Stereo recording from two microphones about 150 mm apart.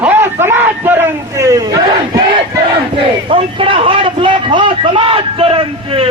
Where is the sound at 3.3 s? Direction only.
35° right (ahead or behind).